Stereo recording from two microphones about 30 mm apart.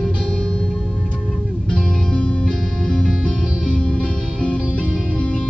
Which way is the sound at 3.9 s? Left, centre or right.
Left.